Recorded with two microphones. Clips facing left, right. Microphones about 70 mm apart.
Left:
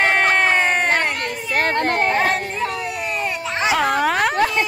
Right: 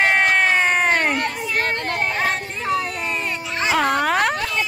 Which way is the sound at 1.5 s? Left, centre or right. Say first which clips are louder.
Left 8 dB; left.